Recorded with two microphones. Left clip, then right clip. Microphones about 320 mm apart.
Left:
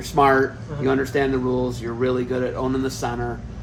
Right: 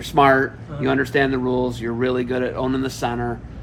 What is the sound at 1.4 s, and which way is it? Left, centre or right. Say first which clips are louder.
Mantra: right 2 dB; right.